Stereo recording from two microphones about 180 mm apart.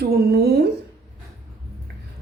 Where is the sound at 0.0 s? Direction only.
60° right (ahead or behind).